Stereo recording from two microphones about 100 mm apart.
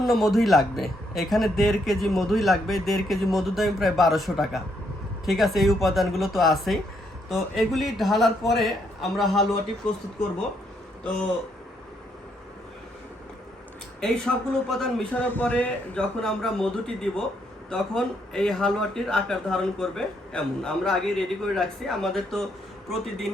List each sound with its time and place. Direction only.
0.0 s a man's voice: centre (ahead or behind)
14.0 s a man's voice: 5° left (ahead or behind)
15.1 s a man's voice: 15° left (ahead or behind)
16.2 s a man's voice: 5° left (ahead or behind)